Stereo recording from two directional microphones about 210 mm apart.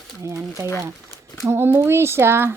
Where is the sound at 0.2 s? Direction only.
15° right (ahead or behind).